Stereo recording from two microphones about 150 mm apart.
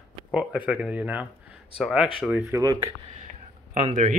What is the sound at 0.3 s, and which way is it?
Speech, 5° right (ahead or behind).